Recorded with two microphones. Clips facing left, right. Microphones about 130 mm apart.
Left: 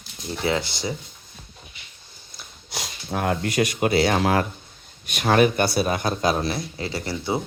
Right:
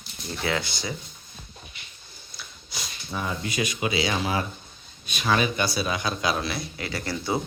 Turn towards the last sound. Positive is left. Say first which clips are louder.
# left 2 dB
turn(degrees=25)  # may be behind; listen again after turning